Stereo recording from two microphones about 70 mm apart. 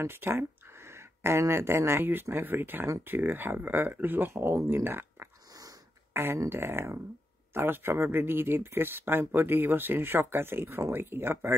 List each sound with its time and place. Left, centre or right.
0.0 s speech: right
5.5 s sniff: right
6.1 s a sound: right
6.5 s speech: right